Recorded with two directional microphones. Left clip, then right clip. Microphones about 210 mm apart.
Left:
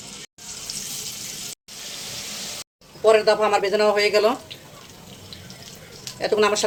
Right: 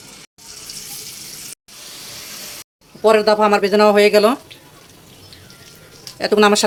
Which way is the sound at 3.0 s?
50° right (ahead or behind).